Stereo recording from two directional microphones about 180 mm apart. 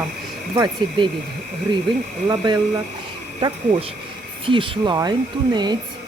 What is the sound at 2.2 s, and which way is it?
Speech, 25° right (ahead or behind).